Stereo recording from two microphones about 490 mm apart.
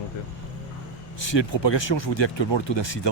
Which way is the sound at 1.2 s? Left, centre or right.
Left.